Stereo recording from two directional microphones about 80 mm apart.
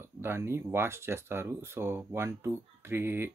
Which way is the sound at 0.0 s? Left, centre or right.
Right.